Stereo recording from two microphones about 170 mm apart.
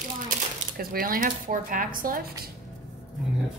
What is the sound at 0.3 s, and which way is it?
Speech, 60° right (ahead or behind).